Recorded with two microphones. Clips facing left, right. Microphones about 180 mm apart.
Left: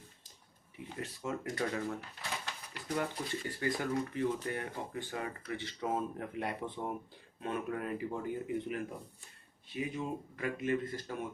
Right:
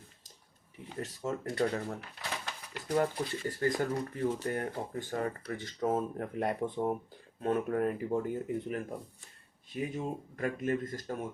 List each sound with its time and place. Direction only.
0.9 s speech: 40° right (ahead or behind)
3.0 s speech: 45° right (ahead or behind)